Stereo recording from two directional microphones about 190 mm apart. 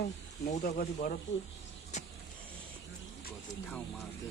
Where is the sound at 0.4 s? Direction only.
50° left (ahead or behind).